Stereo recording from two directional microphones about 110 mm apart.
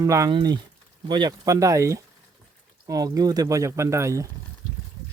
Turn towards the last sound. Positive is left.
turn(degrees=-25)  # may be behind; listen again after turning